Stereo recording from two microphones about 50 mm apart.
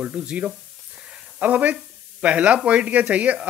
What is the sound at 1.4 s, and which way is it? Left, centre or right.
A man's voice, right.